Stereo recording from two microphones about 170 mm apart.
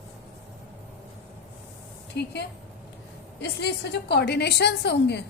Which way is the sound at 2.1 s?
75° left (ahead or behind).